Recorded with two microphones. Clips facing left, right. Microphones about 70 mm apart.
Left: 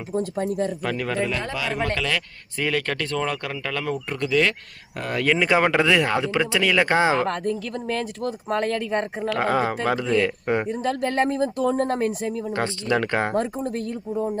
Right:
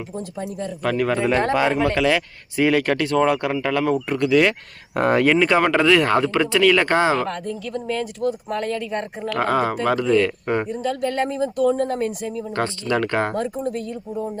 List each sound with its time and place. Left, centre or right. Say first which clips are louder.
0.2 s speech: left 6 dB; left
0.8 s speech: right 4 dB; centre
1.3 s speech: right 9 dB; right
2.0 s speech: right 7 dB; centre
4.9 s speech: right 9 dB; right
5.4 s speech: right 2 dB; centre
8.4 s speech: left 1 dB; left
9.3 s speech: right 2 dB; centre
10.7 s speech: right 1 dB; left
12.5 s speech: right 2 dB; left